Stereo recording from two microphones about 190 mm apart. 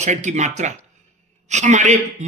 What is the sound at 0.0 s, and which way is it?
A man's voice, 40° right (ahead or behind).